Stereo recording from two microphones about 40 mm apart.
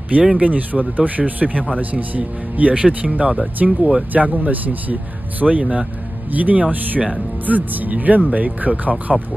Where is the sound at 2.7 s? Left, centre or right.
Right.